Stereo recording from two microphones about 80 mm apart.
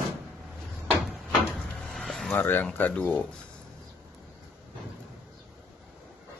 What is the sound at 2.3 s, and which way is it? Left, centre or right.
Speech, left.